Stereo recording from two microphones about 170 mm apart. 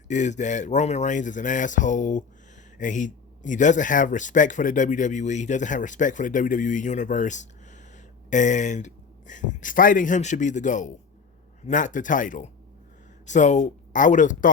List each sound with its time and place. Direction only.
0.1 s speech: 45° left (ahead or behind)